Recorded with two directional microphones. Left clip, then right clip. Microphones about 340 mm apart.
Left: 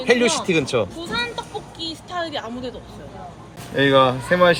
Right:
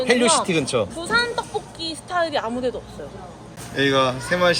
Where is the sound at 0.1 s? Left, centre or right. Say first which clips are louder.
Left 2 dB; centre.